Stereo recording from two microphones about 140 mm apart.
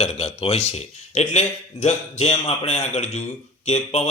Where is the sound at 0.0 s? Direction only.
50° left (ahead or behind).